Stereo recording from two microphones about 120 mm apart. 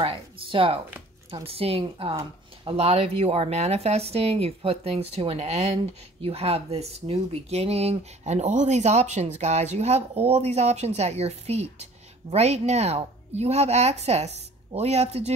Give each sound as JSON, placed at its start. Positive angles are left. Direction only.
{"t": 0.0, "sound": "speech", "side_deg": -50}